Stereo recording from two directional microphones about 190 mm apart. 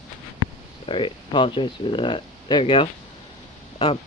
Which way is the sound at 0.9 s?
25° left (ahead or behind).